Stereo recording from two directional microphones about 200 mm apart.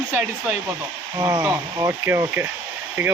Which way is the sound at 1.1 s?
15° right (ahead or behind).